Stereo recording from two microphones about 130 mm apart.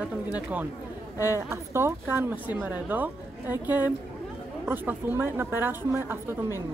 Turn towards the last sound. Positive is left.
turn(degrees=-20)  # may be behind; listen again after turning